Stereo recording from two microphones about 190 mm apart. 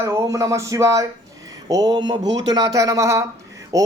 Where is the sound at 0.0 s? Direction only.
15° right (ahead or behind).